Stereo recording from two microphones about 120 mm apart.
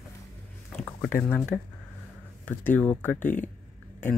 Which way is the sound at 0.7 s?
15° left (ahead or behind).